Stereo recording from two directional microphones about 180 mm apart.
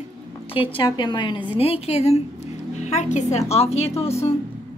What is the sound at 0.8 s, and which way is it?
A woman's voice, 25° left (ahead or behind).